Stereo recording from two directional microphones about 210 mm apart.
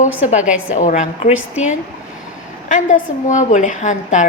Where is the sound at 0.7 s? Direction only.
35° left (ahead or behind).